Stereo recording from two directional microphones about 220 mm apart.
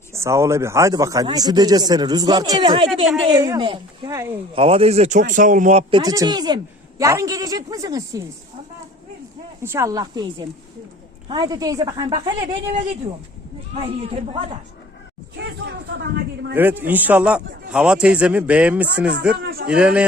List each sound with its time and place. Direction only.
0.1 s a man's voice: 10° right (ahead or behind); by 5.8 s 35° right (ahead or behind)
5.9 s speech: 15° right (ahead or behind)
9.6 s speech: 10° right (ahead or behind)
11.3 s speech: 15° right (ahead or behind)
13.8 s speech: 25° right (ahead or behind)
15.4 s speech: 50° right (ahead or behind)
16.6 s a man's voice: 10° right (ahead or behind)